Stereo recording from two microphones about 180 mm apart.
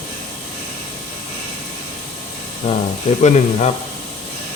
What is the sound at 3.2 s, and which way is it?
Speech, 40° left (ahead or behind).